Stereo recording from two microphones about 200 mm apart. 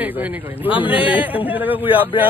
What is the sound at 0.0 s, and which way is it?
Speech, 10° right (ahead or behind).